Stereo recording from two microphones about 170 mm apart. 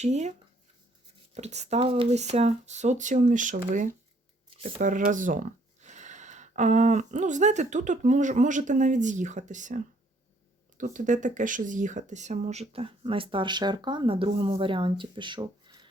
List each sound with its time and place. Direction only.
0.0 s speech: 40° right (ahead or behind)
4.4 s a sound: 35° right (ahead or behind)
4.8 s speech: 50° right (ahead or behind); by 15.9 s 25° right (ahead or behind)